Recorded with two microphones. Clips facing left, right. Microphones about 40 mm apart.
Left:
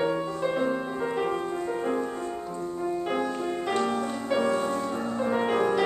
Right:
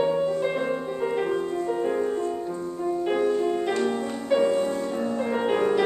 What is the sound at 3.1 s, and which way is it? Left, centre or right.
Music, centre.